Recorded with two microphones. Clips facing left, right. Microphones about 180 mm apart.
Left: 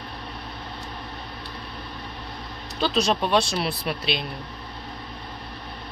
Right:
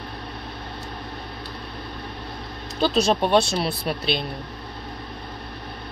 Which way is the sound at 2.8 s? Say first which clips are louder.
Right 3 dB; 5° right (ahead or behind).